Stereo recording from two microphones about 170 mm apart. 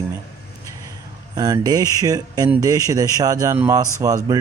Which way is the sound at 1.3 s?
20° right (ahead or behind).